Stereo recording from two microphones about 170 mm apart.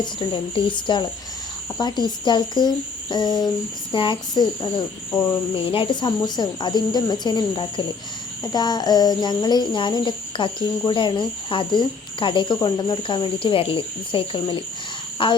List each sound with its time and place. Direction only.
0.0 s cricket: 30° left (ahead or behind)